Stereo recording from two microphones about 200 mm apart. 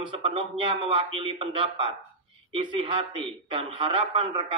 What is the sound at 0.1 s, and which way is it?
A man's voice, 30° right (ahead or behind).